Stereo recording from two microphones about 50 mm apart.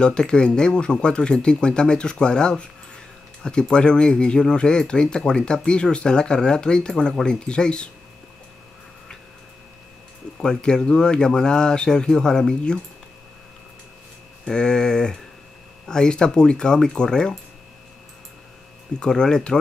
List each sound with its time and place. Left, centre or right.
0.0 s speech: centre
10.3 s speech: centre
14.4 s speech: centre
18.9 s speech: centre